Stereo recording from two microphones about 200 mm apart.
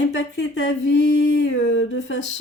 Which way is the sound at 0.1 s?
65° left (ahead or behind).